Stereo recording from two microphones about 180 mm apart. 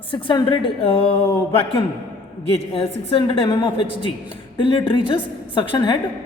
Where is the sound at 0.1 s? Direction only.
30° left (ahead or behind).